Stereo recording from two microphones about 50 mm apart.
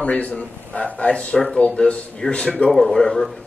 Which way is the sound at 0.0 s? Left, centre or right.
Left.